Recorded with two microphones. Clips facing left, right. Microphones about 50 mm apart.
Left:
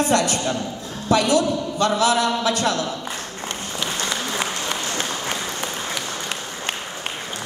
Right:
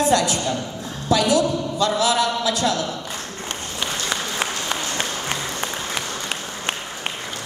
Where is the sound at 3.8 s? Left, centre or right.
Centre.